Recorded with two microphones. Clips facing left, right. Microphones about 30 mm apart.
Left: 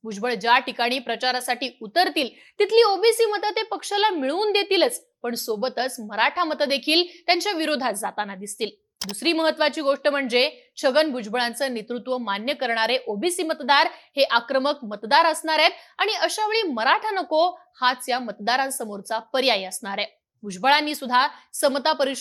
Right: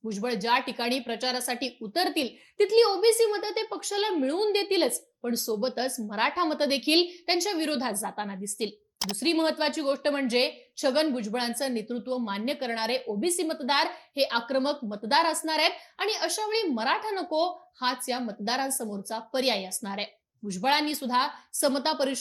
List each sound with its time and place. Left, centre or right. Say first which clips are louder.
0.0 s a woman's voice: left 5 dB; left